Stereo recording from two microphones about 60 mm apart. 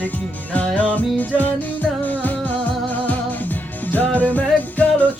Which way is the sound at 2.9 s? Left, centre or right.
Left.